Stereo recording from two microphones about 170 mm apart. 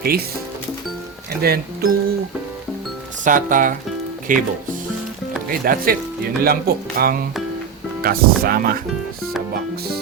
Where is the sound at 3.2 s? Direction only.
50° right (ahead or behind).